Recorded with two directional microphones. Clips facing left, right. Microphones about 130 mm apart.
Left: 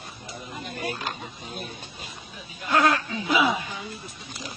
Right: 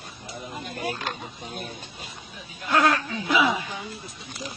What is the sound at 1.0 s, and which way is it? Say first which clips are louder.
Speech: right 1 dB; centre (ahead or behind).